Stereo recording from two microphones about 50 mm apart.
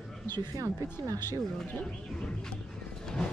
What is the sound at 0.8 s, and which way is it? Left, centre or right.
Speech, left.